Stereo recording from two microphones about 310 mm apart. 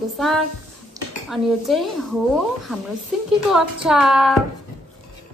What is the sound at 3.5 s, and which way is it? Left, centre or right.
Music, centre.